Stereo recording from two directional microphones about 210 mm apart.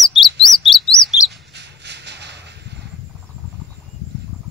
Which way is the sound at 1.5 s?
55° right (ahead or behind).